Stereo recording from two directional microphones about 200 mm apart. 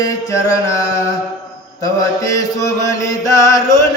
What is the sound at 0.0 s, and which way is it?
Chant, 15° left (ahead or behind).